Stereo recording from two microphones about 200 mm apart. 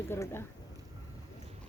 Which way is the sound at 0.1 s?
10° left (ahead or behind).